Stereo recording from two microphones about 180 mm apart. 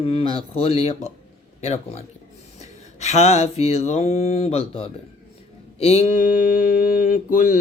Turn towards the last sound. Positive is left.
turn(degrees=45)  # may be behind; listen again after turning